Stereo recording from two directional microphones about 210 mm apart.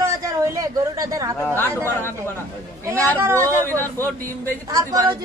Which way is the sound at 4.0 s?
10° left (ahead or behind).